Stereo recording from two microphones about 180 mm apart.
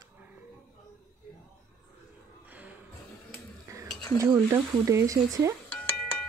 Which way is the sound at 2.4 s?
10° right (ahead or behind).